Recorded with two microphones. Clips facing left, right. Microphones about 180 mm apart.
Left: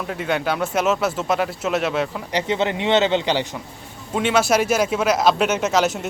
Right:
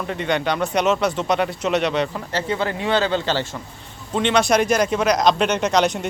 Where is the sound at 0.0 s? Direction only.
5° left (ahead or behind).